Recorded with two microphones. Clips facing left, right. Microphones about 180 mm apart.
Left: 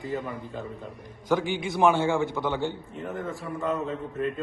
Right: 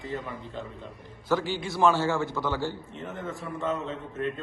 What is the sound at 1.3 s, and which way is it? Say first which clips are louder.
A man's voice: left 2 dB; 15° left (ahead or behind).